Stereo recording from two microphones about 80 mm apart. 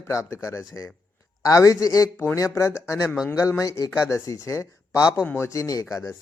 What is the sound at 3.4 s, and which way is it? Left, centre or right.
Speech, left.